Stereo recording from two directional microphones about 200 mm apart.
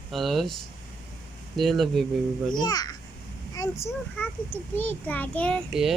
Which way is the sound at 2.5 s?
20° left (ahead or behind).